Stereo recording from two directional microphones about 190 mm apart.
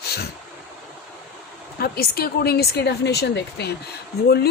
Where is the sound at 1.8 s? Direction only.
55° left (ahead or behind).